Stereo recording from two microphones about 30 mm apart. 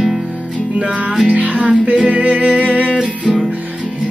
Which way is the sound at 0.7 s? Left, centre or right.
Right.